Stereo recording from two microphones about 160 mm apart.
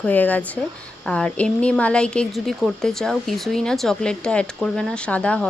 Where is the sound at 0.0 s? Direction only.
10° left (ahead or behind).